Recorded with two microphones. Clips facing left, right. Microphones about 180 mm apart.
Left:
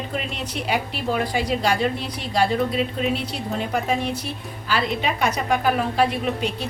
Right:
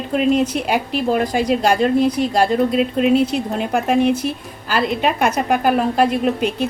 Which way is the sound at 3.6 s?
60° right (ahead or behind).